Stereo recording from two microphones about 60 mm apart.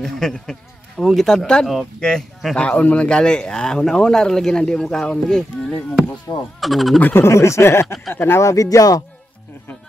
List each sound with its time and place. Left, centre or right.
0.0 s speech: centre
6.3 s speech: left
6.6 s speech: centre
7.0 s speech: left
7.2 s speech: left
8.4 s speech: left